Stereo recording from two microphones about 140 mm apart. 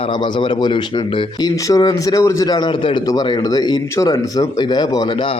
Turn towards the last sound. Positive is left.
turn(degrees=35)  # may be behind; listen again after turning